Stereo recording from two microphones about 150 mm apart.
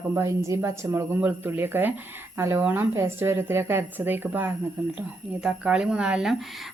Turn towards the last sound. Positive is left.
turn(degrees=0)  # may be behind; listen again after turning